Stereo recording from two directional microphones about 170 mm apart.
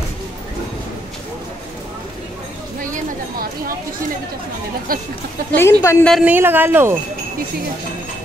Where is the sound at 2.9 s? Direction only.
55° right (ahead or behind).